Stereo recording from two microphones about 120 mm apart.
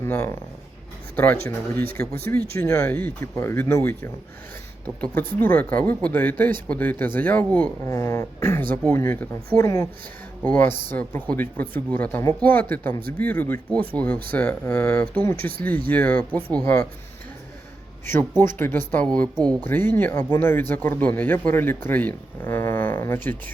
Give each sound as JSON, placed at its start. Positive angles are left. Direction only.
{"t": 0.0, "sound": "speech", "side_deg": 20}
{"t": 7.9, "sound": "speech", "side_deg": 25}
{"t": 18.0, "sound": "speech", "side_deg": 20}